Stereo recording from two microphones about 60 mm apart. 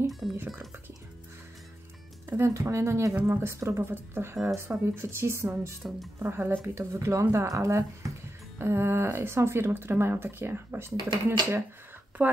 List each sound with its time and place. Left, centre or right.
0.1 s music: centre
2.2 s music: right
2.5 s speech: right
8.5 s speech: right
12.2 s speech: right